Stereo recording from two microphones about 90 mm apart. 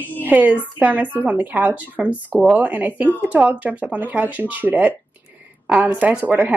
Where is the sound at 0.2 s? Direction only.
20° right (ahead or behind).